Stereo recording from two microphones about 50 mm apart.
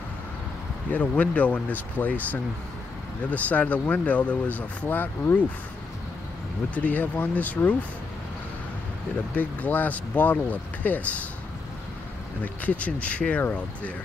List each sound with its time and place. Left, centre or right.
0.9 s speech: left
6.7 s speech: left
9.3 s speech: left
12.6 s speech: left